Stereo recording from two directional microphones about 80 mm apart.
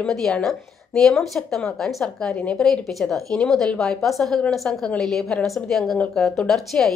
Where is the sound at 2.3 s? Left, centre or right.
Centre.